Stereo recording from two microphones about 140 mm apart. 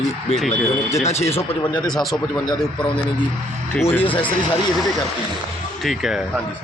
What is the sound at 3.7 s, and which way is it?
Speech, 15° left (ahead or behind).